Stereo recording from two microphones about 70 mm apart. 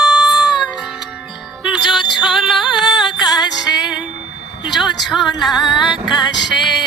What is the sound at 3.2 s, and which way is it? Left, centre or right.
Music, left.